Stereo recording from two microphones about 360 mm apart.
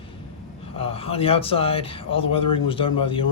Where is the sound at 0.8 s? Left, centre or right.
Centre.